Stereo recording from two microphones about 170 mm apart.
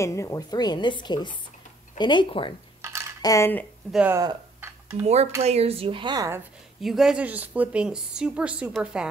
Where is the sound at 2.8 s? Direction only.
15° right (ahead or behind).